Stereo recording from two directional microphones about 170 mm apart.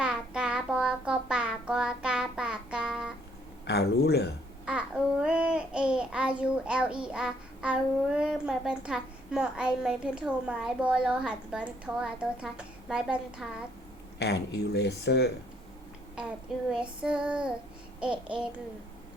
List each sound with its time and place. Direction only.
0.0 s child singing: 5° right (ahead or behind)
3.7 s speech: 75° left (ahead or behind)
4.6 s babbling: 5° right (ahead or behind)
14.2 s speech: 80° left
16.6 s child singing: 5° right (ahead or behind)